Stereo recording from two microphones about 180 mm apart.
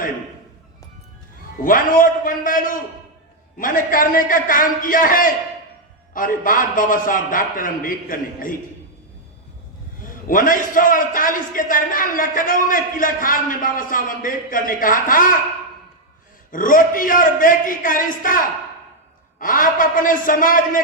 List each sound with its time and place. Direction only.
1.6 s a man's voice: 50° left (ahead or behind)
10.1 s a man's voice: 50° left (ahead or behind)
16.5 s a man's voice: 50° left (ahead or behind)